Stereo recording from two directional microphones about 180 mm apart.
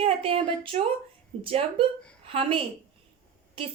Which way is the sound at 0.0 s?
30° right (ahead or behind).